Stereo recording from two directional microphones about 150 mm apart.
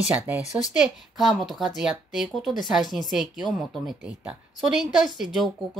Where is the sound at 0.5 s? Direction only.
5° right (ahead or behind).